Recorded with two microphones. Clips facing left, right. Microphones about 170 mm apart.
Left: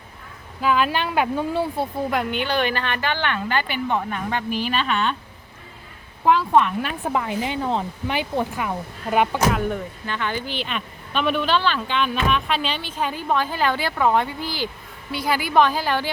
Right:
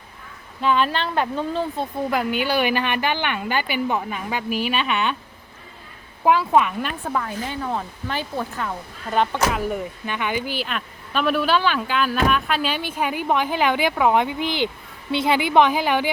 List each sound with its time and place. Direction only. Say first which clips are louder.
0.6 s speech: even; 5° left (ahead or behind)
6.2 s a woman's voice: even; 5° right (ahead or behind)
7.0 s speech: left 2 dB; 20° left (ahead or behind)
9.5 s a woman's voice: left 1 dB; 5° right (ahead or behind)